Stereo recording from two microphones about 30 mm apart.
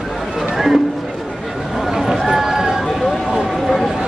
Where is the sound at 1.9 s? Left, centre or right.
Centre.